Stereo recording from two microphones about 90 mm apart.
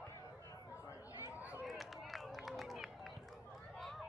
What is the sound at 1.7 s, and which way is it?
Run, centre (ahead or behind).